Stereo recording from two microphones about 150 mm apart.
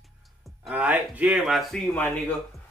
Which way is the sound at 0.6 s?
10° right (ahead or behind).